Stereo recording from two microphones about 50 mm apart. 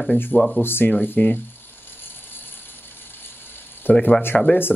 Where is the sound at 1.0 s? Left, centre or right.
Left.